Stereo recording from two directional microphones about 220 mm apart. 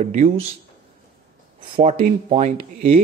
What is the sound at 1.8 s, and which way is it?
Speech, 30° right (ahead or behind).